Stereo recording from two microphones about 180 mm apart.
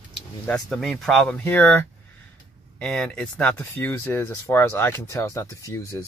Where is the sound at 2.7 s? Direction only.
5° left (ahead or behind).